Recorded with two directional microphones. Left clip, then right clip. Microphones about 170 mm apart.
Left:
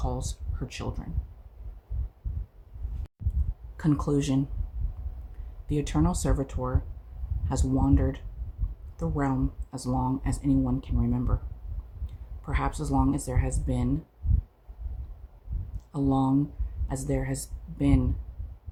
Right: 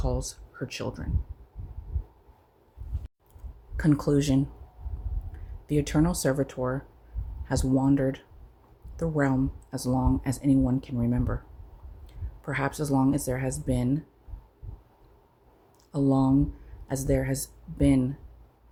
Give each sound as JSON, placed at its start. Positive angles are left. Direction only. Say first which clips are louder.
{"t": 0.0, "sound": "speech", "louder": "right 3 dB", "side_deg": -15}
{"t": 3.8, "sound": "speech", "louder": "right 3 dB", "side_deg": -20}
{"t": 5.6, "sound": "speech", "louder": "right 3 dB", "side_deg": -20}
{"t": 12.5, "sound": "speech", "louder": "right 2 dB", "side_deg": -20}
{"t": 15.9, "sound": "speech", "louder": "right 2 dB", "side_deg": -20}